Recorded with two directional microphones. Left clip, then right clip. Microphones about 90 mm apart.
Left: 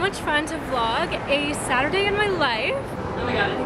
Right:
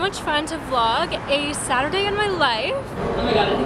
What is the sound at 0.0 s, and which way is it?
Speech, 15° right (ahead or behind).